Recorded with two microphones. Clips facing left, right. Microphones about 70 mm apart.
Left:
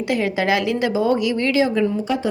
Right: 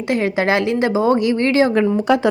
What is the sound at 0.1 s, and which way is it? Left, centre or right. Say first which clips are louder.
A woman's voice: right 3 dB; right.